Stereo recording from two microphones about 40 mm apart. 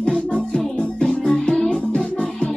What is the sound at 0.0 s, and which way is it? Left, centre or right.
Music, left.